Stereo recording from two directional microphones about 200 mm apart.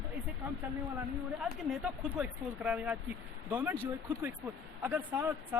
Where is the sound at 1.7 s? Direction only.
5° right (ahead or behind).